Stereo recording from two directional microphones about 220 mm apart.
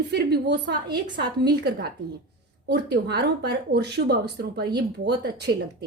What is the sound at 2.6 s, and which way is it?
Speech, 50° right (ahead or behind).